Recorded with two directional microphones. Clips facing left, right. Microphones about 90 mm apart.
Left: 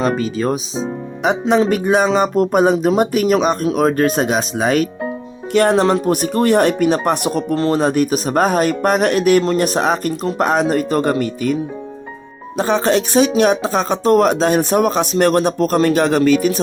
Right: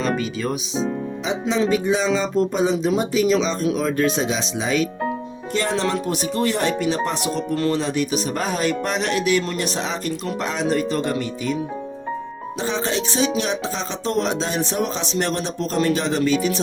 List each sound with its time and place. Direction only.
0.0 s speech: 40° left (ahead or behind)
1.2 s speech: 60° left (ahead or behind)
5.8 s speech: 45° left (ahead or behind)
7.5 s speech: 35° left (ahead or behind)
7.8 s speech: 45° left (ahead or behind)
12.5 s speech: 60° left (ahead or behind)